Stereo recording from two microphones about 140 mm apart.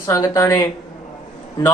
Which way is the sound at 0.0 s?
25° left (ahead or behind).